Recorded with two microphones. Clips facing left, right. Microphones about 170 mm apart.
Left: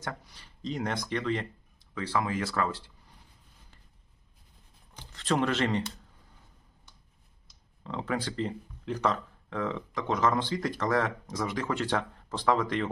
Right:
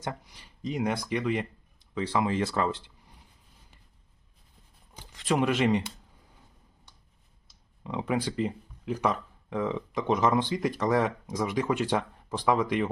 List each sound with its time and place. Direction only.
0.0 s speech: 15° right (ahead or behind)
4.9 s speech: 10° right (ahead or behind)
7.9 s speech: 15° right (ahead or behind)